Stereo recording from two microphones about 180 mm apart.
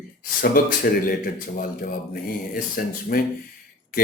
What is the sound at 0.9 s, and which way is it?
Speech, 60° left (ahead or behind).